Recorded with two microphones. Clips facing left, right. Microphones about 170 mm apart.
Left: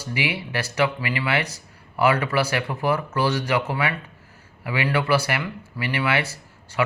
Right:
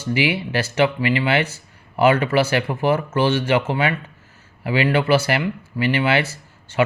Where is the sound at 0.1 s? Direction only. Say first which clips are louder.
Right 6 dB; 25° right (ahead or behind).